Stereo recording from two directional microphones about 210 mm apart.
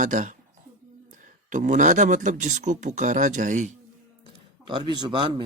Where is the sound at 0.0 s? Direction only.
35° right (ahead or behind).